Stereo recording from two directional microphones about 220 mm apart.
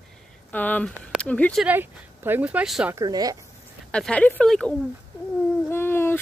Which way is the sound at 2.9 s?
15° right (ahead or behind).